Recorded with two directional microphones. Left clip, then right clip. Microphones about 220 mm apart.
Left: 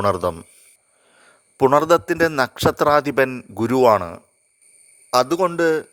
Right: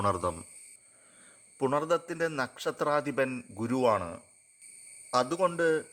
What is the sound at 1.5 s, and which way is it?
A man's voice, 45° left (ahead or behind).